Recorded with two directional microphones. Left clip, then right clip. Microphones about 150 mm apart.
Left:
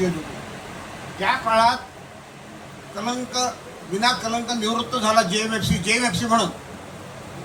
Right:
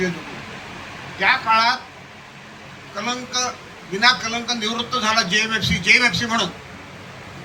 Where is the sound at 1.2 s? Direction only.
50° left (ahead or behind).